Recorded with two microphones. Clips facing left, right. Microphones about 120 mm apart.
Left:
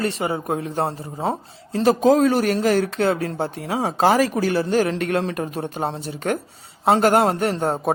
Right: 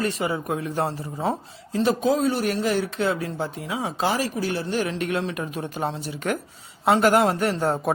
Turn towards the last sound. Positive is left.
turn(degrees=30)  # may be behind; listen again after turning